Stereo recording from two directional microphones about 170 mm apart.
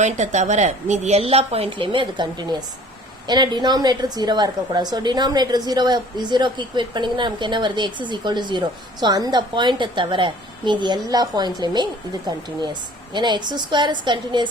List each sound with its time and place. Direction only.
0.0 s a woman's voice: 45° right (ahead or behind); by 14.4 s 25° right (ahead or behind)